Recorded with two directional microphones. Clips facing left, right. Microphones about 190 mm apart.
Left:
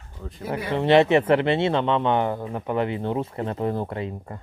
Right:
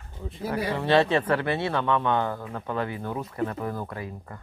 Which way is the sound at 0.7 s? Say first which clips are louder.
Left 5 dB; 20° left (ahead or behind).